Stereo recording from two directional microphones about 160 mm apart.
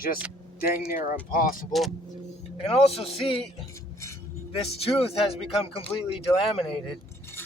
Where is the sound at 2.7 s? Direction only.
40° left (ahead or behind).